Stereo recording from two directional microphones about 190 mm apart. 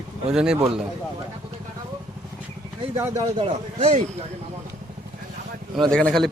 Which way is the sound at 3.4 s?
30° right (ahead or behind).